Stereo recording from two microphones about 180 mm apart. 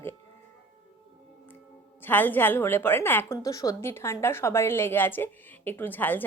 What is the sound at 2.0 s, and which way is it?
A woman's voice, 10° left (ahead or behind).